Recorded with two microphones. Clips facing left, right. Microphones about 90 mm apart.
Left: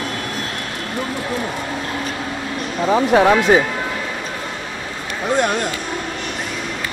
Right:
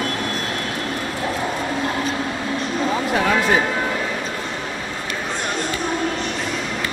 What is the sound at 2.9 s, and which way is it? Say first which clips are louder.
Speech: left 9 dB; 35° left (ahead or behind).